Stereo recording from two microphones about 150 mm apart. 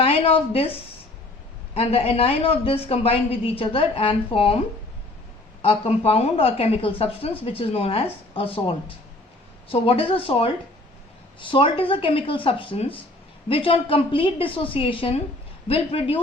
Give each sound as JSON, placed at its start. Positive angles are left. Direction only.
{"t": 0.0, "sound": "a woman's voice", "side_deg": 40}
{"t": 5.6, "sound": "a woman's voice", "side_deg": 40}